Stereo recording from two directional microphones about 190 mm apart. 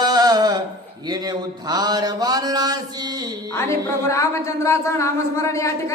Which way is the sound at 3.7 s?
15° left (ahead or behind).